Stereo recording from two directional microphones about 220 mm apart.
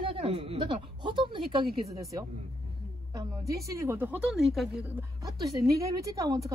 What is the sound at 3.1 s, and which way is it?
A woman's voice, 15° right (ahead or behind).